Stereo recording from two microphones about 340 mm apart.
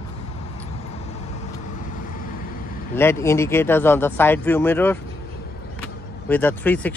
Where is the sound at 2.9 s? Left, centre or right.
Centre.